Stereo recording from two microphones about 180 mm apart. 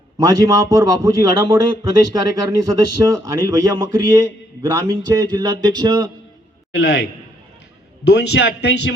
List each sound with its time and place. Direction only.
0.2 s a man's voice: 15° right (ahead or behind)
6.7 s a man's voice: 65° left (ahead or behind)